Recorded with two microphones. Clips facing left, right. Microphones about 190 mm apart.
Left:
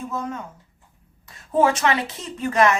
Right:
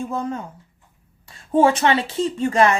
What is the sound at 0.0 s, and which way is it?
Speech, 30° right (ahead or behind).